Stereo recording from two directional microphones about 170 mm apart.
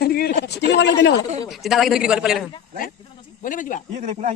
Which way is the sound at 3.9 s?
45° right (ahead or behind).